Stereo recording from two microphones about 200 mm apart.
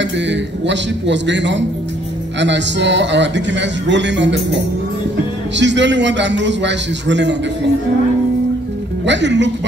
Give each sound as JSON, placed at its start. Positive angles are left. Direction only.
{"t": 0.0, "sound": "a man's voice", "side_deg": -65}
{"t": 5.6, "sound": "a man's voice", "side_deg": -60}
{"t": 9.0, "sound": "a man's voice", "side_deg": -60}